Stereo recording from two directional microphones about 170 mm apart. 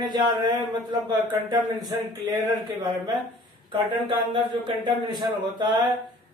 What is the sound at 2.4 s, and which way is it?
Speech, 25° right (ahead or behind).